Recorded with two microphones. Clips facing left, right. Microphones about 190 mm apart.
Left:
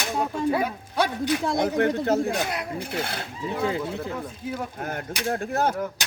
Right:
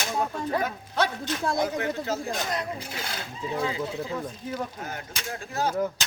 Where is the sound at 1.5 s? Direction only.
60° left (ahead or behind).